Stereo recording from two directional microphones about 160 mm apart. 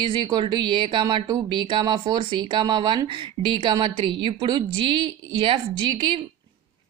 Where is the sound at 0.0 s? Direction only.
30° right (ahead or behind).